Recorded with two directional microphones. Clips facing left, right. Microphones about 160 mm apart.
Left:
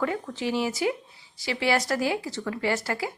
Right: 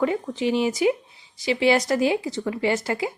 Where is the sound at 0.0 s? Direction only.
20° right (ahead or behind).